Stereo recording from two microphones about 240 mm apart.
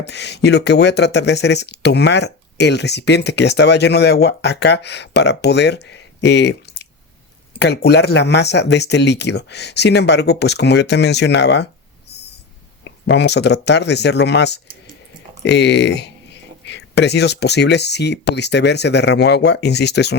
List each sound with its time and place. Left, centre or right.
0.0 s speech: left
13.1 s speech: left